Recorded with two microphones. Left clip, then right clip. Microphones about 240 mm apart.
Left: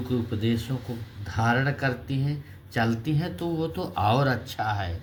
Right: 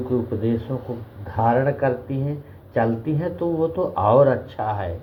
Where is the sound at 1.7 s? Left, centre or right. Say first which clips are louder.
Right 7 dB; left.